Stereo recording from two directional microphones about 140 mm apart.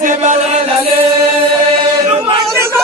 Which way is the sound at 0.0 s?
60° right (ahead or behind).